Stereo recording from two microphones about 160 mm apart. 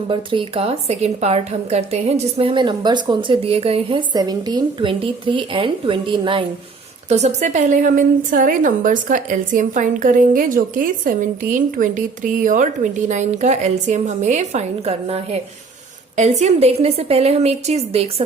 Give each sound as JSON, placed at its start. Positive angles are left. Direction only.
{"t": 0.1, "sound": "a woman's voice", "side_deg": -30}
{"t": 7.1, "sound": "a woman's voice", "side_deg": -45}